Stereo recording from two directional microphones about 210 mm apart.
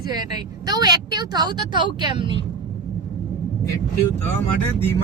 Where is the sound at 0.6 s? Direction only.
20° right (ahead or behind).